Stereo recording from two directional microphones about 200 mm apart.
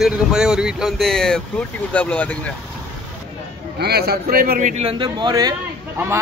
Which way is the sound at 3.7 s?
55° right (ahead or behind).